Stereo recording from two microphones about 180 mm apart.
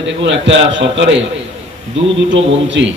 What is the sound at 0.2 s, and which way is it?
Speech, 90° right.